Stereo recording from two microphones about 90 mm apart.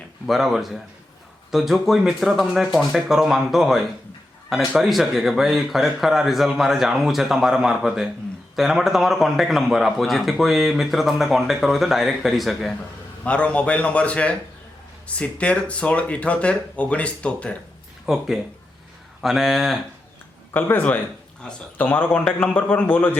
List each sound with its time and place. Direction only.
0.3 s a man's voice: centre (ahead or behind)
13.2 s speech: 15° left (ahead or behind)
18.0 s a man's voice: 5° right (ahead or behind)
20.5 s speech: 20° left (ahead or behind)